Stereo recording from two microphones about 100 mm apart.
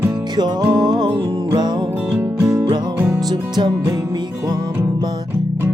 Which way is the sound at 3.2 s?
45° right (ahead or behind).